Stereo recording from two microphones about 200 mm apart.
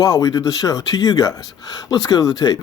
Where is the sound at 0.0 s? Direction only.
20° left (ahead or behind).